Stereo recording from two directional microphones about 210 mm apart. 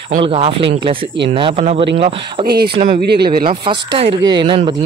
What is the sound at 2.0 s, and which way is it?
Speech, 45° right (ahead or behind).